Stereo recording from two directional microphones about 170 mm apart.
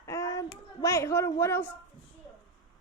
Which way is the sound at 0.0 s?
20° left (ahead or behind).